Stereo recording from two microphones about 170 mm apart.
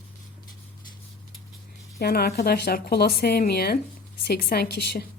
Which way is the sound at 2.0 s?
65° left (ahead or behind).